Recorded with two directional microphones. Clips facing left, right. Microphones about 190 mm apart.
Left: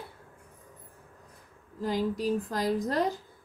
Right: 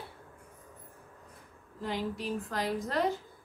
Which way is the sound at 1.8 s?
35° left (ahead or behind).